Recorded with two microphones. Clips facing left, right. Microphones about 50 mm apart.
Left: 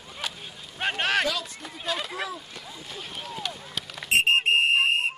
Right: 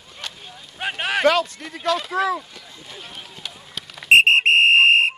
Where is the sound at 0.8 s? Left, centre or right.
Centre.